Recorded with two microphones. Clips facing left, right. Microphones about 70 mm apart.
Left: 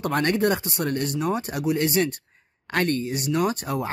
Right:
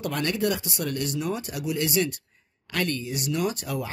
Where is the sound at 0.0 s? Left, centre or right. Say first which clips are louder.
Left 4 dB; left.